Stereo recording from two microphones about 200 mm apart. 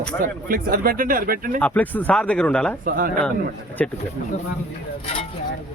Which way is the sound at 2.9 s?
45° right (ahead or behind).